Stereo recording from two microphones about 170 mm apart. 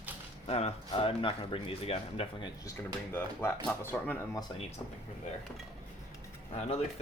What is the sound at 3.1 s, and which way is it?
Speech, 10° left (ahead or behind).